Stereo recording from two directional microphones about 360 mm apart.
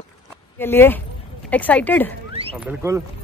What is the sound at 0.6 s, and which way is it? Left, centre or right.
Speech, centre.